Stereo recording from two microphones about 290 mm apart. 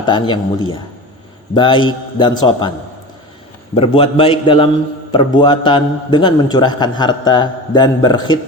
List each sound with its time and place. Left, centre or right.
0.0 s a man's voice: centre
1.5 s a man's voice: centre
3.8 s a man's voice: centre